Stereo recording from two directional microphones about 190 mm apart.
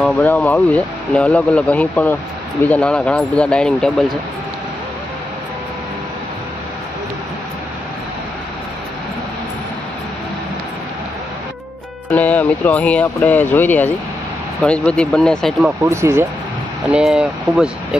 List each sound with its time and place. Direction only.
0.0 s speech: 10° left (ahead or behind)
12.1 s speech: 10° left (ahead or behind)
15.8 s speech: 15° right (ahead or behind)
16.9 s speech: 5° right (ahead or behind)